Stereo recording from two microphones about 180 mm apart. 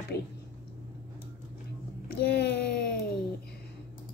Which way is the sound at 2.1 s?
65° left (ahead or behind).